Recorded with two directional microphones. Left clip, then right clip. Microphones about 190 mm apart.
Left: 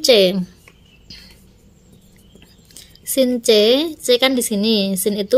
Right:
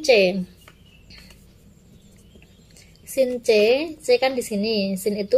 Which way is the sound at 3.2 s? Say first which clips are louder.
Left 4 dB; 50° left (ahead or behind).